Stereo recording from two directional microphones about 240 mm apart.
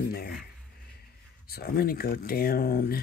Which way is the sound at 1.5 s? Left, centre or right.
Left.